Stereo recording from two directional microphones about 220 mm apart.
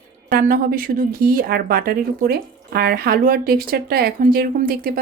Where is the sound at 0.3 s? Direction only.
45° right (ahead or behind).